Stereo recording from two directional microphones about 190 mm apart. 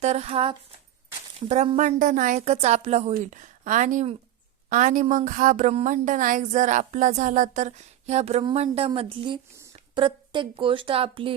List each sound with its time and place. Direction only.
0.0 s a woman's voice: 35° right (ahead or behind)